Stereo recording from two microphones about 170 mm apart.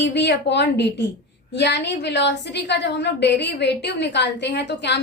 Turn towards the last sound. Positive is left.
turn(degrees=90)